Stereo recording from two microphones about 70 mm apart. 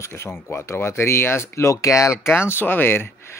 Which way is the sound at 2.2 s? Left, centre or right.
Left.